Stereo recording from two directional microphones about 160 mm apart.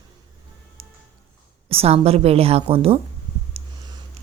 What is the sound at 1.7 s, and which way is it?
Speech, 40° right (ahead or behind).